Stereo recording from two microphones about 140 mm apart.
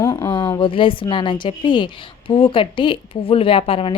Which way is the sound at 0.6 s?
35° left (ahead or behind).